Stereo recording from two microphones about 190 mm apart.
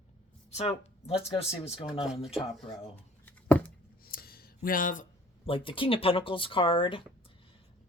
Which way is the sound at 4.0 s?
50° left (ahead or behind).